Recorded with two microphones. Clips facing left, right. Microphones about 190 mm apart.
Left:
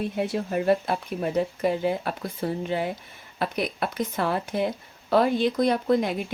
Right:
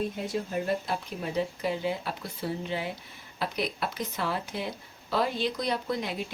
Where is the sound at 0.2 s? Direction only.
65° left (ahead or behind).